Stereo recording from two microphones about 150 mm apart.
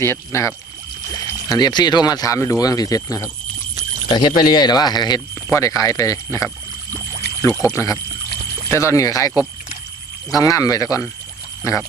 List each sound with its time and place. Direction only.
0.0 s speech: 20° left (ahead or behind)
10.3 s speech: 25° left (ahead or behind)